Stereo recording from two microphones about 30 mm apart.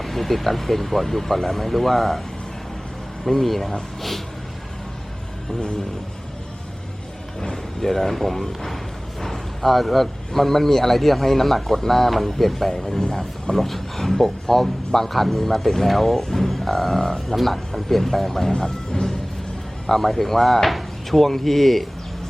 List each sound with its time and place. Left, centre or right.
0.0 s speech: centre
3.2 s speech: centre
7.5 s speech: centre
18.9 s music: left
19.9 s speech: centre